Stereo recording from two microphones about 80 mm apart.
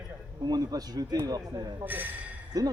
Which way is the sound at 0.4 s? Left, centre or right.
Right.